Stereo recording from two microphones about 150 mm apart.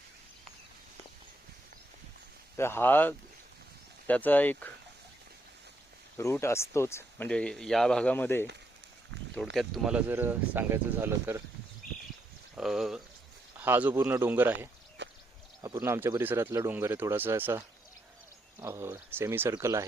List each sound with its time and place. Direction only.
2.6 s speech: 15° left (ahead or behind)
6.1 s speech: 20° left (ahead or behind)
7.3 s speech: 5° left (ahead or behind)
9.3 s speech: centre (ahead or behind); by 11.4 s 15° right (ahead or behind)
12.5 s speech: centre (ahead or behind)
18.6 s speech: 15° right (ahead or behind)